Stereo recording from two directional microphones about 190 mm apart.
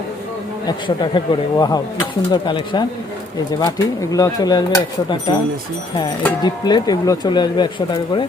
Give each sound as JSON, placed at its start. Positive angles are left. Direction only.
{"t": 0.9, "sound": "speech", "side_deg": 25}
{"t": 6.4, "sound": "speech", "side_deg": 20}